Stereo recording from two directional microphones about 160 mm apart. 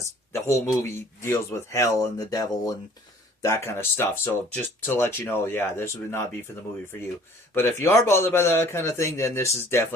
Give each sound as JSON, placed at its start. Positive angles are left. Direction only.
{"t": 0.3, "sound": "speech", "side_deg": 15}
{"t": 7.5, "sound": "speech", "side_deg": 15}